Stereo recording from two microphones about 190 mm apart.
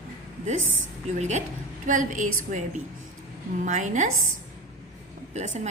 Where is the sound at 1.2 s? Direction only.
35° right (ahead or behind).